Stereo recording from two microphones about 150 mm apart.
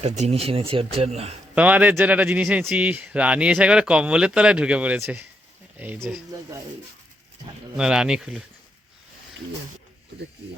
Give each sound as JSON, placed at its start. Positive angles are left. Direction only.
{"t": 0.0, "sound": "speech", "side_deg": -45}
{"t": 1.5, "sound": "speech", "side_deg": -10}
{"t": 7.8, "sound": "speech", "side_deg": -5}